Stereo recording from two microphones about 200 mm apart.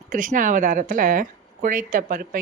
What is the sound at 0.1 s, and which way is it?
Speech, 40° right (ahead or behind).